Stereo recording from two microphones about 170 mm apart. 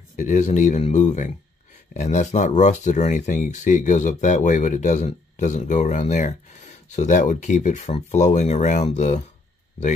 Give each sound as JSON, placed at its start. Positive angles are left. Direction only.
{"t": 0.1, "sound": "speech", "side_deg": 45}